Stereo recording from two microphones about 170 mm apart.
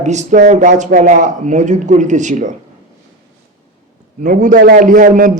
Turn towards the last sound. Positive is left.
turn(degrees=-50)  # may be behind; listen again after turning